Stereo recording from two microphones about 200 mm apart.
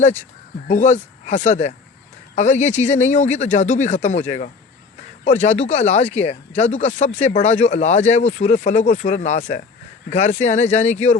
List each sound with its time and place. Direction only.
0.7 s speech: 35° left (ahead or behind)